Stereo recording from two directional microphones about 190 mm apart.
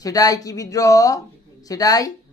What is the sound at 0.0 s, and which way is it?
A man's voice, 20° left (ahead or behind).